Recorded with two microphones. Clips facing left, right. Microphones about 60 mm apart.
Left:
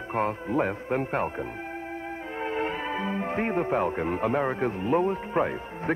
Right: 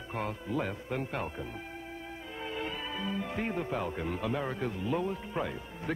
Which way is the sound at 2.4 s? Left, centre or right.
Left.